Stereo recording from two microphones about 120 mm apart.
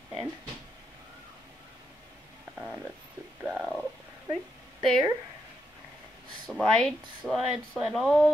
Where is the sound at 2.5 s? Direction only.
5° right (ahead or behind).